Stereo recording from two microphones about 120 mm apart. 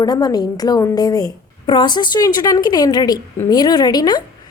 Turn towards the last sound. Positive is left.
turn(degrees=35)  # may be behind; listen again after turning